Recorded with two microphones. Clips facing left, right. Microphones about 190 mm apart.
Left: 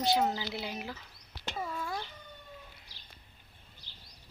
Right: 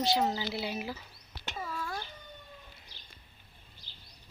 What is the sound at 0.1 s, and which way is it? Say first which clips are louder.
Speech: even; centre (ahead or behind).